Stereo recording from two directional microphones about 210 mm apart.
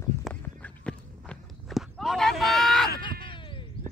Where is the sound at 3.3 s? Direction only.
25° left (ahead or behind).